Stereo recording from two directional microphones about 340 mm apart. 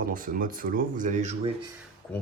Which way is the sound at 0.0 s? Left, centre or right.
Right.